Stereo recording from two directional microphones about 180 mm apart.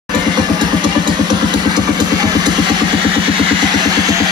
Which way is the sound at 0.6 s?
25° right (ahead or behind).